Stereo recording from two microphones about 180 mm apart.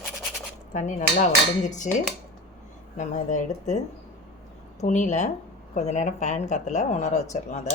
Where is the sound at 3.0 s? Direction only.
40° left (ahead or behind).